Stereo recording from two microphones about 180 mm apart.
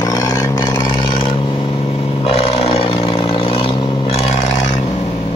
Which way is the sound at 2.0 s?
35° left (ahead or behind).